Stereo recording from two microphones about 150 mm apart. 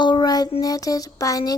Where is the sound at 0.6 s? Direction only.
25° left (ahead or behind).